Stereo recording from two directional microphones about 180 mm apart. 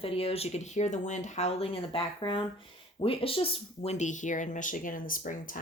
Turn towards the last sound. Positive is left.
turn(degrees=50)  # may be behind; listen again after turning